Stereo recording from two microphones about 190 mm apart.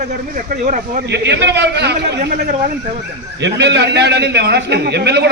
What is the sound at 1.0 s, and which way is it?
A man's voice, 65° right (ahead or behind).